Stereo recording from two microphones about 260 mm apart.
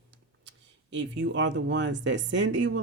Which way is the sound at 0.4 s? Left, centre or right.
Right.